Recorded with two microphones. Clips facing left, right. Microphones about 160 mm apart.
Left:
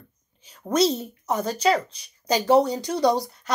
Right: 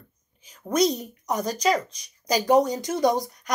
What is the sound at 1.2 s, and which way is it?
A woman's voice, 30° left (ahead or behind).